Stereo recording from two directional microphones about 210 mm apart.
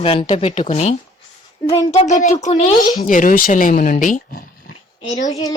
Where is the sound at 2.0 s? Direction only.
35° left (ahead or behind).